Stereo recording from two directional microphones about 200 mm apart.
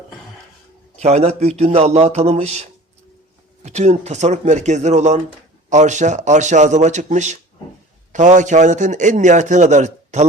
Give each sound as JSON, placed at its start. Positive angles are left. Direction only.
{"t": 0.9, "sound": "a man's voice", "side_deg": -30}